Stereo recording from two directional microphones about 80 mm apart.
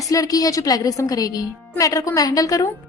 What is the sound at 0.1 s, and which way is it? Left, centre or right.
A woman's voice, left.